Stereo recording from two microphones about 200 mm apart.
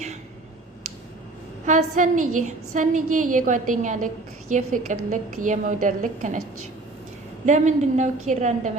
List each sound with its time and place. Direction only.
1.6 s a woman's voice: 40° right (ahead or behind)
7.4 s a woman's voice: 35° right (ahead or behind)